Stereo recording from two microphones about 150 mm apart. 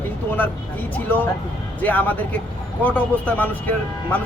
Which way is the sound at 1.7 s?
10° left (ahead or behind).